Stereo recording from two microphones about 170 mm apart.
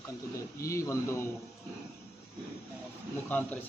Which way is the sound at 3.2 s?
10° left (ahead or behind).